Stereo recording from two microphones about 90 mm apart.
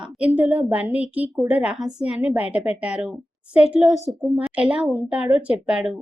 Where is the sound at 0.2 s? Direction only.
15° right (ahead or behind).